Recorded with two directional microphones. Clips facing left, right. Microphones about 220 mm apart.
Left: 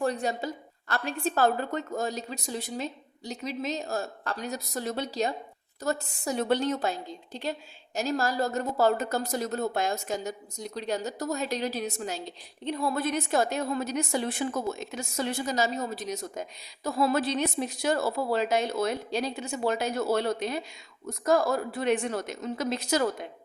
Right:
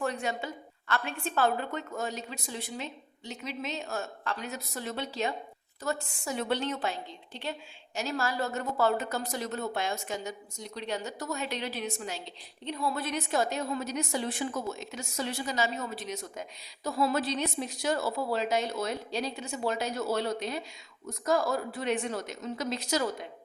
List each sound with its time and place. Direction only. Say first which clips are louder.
0.0 s a woman's voice: left 4 dB; 35° left (ahead or behind); by 23.0 s 55° left (ahead or behind)